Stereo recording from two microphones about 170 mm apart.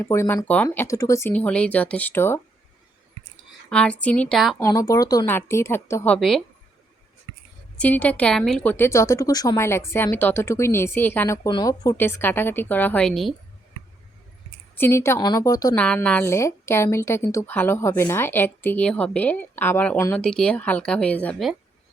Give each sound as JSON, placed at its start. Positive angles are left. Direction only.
{"t": 0.0, "sound": "a woman's voice", "side_deg": 15}
{"t": 1.3, "sound": "a woman's voice", "side_deg": 5}
{"t": 3.7, "sound": "a woman's voice", "side_deg": 5}
{"t": 4.6, "sound": "a woman's voice", "side_deg": 20}
{"t": 6.1, "sound": "a woman's voice", "side_deg": 0}
{"t": 7.8, "sound": "a woman's voice", "side_deg": 10}
{"t": 11.4, "sound": "a woman's voice", "side_deg": 20}
{"t": 14.8, "sound": "a woman's voice", "side_deg": 15}
{"t": 15.7, "sound": "a woman's voice", "side_deg": 10}